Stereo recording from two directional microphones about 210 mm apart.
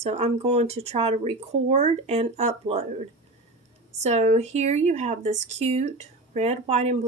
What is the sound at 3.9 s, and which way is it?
A woman's voice, 30° right (ahead or behind).